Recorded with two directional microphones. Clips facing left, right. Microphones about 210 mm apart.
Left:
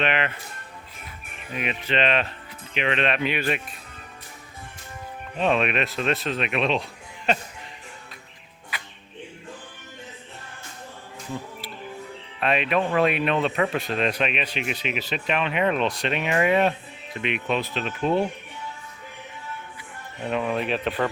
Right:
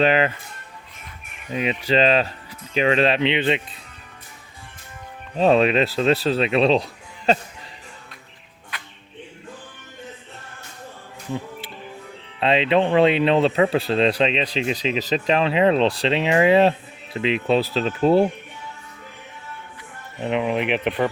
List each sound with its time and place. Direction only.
0.0 s speech: 35° right (ahead or behind)
2.0 s speech: 35° right (ahead or behind)
5.4 s speech: 35° right (ahead or behind)
12.4 s speech: 25° right (ahead or behind)
20.2 s speech: 20° right (ahead or behind)